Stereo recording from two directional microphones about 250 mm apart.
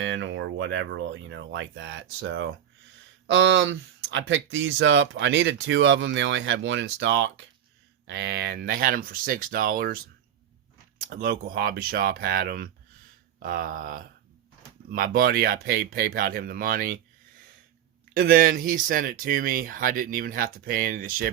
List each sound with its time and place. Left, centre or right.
0.0 s speech: right
18.1 s speech: right